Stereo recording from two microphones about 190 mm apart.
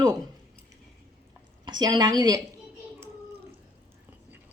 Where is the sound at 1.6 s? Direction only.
25° right (ahead or behind).